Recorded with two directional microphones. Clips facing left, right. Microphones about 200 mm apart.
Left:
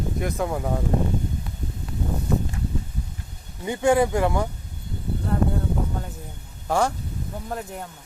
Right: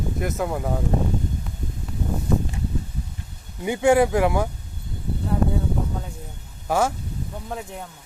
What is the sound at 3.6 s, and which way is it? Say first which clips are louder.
Speech: right 2 dB; 10° right (ahead or behind).